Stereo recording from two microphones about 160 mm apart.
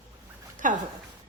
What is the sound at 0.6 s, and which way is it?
Speech, 55° right (ahead or behind).